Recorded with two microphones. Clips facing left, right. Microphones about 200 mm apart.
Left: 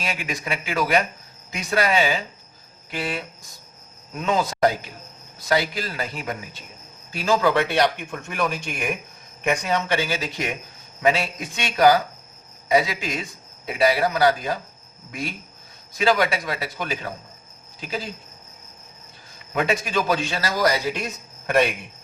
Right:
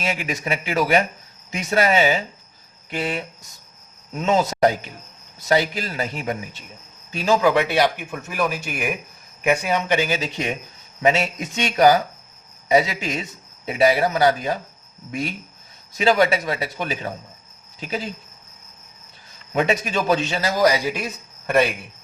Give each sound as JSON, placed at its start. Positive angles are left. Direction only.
{"t": 0.0, "sound": "a man's voice", "side_deg": -25}
{"t": 16.0, "sound": "a man's voice", "side_deg": -25}
{"t": 19.5, "sound": "a man's voice", "side_deg": -25}